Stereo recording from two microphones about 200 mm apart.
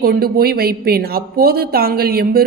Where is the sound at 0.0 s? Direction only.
50° right (ahead or behind).